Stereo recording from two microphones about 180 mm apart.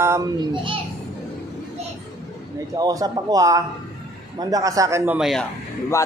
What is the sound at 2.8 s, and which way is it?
A man's voice, 20° right (ahead or behind).